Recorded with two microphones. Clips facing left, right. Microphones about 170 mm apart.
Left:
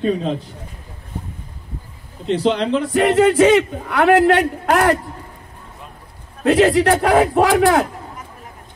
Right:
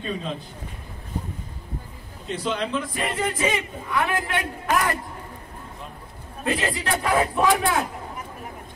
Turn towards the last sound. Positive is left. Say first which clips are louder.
# left 7 dB
turn(degrees=75)  # may be behind; listen again after turning